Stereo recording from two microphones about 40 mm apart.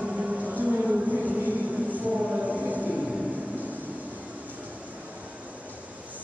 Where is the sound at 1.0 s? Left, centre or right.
Right.